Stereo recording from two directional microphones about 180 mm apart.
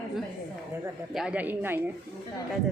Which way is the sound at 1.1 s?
5° right (ahead or behind).